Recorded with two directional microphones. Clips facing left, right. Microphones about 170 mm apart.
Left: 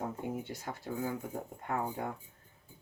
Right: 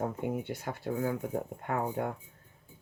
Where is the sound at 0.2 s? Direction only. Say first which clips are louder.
Right 4 dB; 60° right (ahead or behind).